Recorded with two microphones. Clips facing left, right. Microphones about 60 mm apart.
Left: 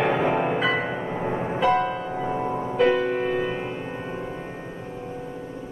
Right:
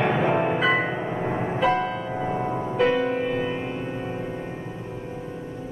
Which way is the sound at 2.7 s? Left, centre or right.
Centre.